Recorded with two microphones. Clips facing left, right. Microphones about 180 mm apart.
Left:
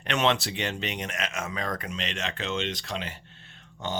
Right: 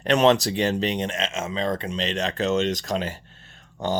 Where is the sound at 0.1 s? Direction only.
40° right (ahead or behind).